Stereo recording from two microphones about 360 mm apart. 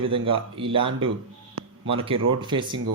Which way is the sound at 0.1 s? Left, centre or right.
Centre.